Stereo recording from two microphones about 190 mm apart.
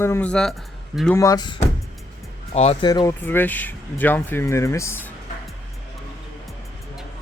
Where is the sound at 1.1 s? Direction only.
15° left (ahead or behind).